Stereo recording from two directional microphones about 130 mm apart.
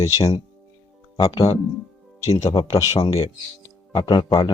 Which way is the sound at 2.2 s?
25° left (ahead or behind).